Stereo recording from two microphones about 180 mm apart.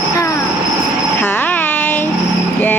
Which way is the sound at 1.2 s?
10° left (ahead or behind).